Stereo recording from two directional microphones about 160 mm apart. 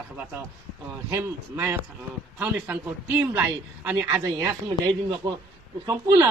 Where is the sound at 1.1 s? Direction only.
15° right (ahead or behind).